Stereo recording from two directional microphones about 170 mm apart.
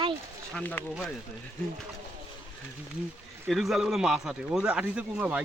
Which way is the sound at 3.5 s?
Centre (ahead or behind).